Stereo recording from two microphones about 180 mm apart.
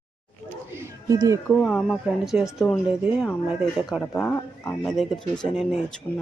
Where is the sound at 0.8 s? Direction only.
20° right (ahead or behind).